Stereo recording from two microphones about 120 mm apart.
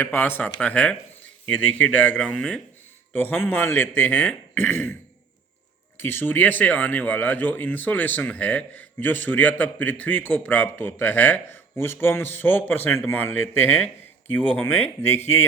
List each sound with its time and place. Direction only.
0.0 s speech: 20° left (ahead or behind)
6.0 s speech: 20° left (ahead or behind)